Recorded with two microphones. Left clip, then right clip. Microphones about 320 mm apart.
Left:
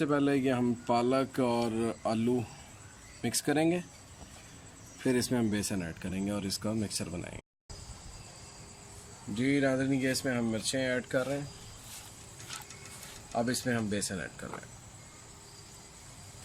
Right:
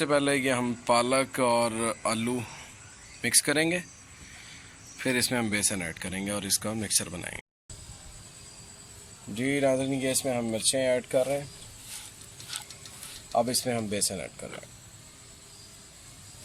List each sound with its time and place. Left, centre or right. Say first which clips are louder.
0.0 s speech: right 4 dB; centre
4.9 s speech: right 3 dB; centre
9.3 s speech: right 3 dB; centre
13.3 s speech: right 5 dB; centre